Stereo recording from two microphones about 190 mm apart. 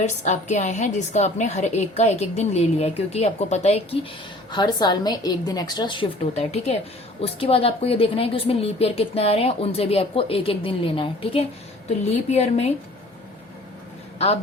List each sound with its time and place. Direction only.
0.0 s a woman's voice: 40° left (ahead or behind)
4.5 s a woman's voice: 20° left (ahead or behind)